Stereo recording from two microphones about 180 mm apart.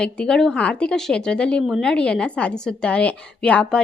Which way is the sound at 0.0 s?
5° left (ahead or behind).